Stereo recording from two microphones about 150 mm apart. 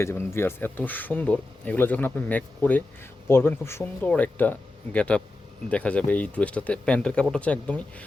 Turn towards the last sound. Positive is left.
turn(degrees=10)  # may be behind; listen again after turning